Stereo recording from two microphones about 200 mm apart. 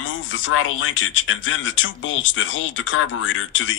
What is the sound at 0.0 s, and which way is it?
Speech, 75° left (ahead or behind).